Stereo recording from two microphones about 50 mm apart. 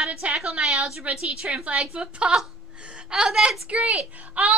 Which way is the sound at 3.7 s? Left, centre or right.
Right.